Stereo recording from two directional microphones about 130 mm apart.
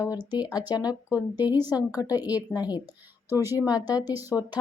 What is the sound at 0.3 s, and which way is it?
Speech, 30° left (ahead or behind).